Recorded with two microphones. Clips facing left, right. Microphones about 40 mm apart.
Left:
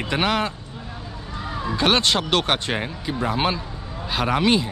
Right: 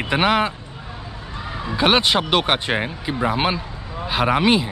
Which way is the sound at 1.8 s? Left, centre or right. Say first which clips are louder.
Right 3 dB; centre.